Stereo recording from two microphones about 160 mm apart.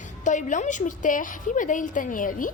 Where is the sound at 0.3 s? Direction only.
50° left (ahead or behind).